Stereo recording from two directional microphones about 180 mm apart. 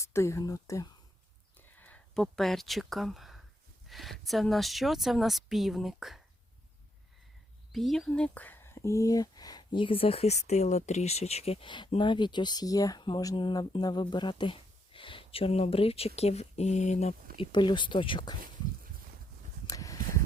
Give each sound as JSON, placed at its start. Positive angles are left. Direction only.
{"t": 0.0, "sound": "speech", "side_deg": 15}
{"t": 1.5, "sound": "a sound", "side_deg": 10}
{"t": 3.8, "sound": "speech", "side_deg": 0}
{"t": 7.7, "sound": "speech", "side_deg": 0}
{"t": 17.3, "sound": "speech", "side_deg": 25}
{"t": 19.6, "sound": "a sound", "side_deg": 20}